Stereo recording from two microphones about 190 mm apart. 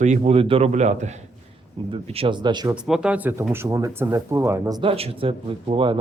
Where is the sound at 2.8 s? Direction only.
5° right (ahead or behind).